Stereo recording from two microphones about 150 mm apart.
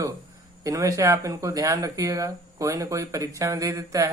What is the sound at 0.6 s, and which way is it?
Speech, 20° right (ahead or behind).